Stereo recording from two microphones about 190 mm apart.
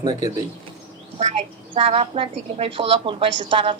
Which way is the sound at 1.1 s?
35° right (ahead or behind).